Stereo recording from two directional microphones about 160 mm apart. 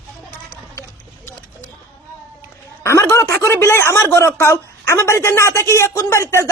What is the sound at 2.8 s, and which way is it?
Speech, 15° left (ahead or behind).